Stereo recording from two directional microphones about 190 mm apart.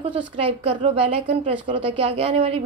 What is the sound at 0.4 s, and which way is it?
A woman's voice, 30° right (ahead or behind).